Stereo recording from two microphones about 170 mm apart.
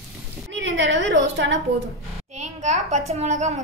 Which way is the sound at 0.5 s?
90° right.